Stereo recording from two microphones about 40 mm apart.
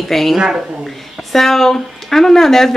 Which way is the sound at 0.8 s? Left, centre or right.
Centre.